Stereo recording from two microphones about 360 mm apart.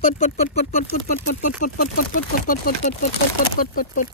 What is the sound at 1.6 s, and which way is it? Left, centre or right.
Speech, left.